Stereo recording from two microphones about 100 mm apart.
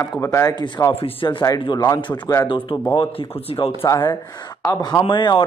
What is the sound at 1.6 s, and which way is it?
Speech, 50° left (ahead or behind).